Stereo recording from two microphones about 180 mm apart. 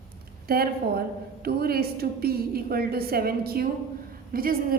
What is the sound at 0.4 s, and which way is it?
A woman's voice, 60° right (ahead or behind).